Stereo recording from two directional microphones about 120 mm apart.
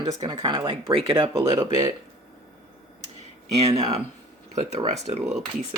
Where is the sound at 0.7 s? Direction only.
45° right (ahead or behind).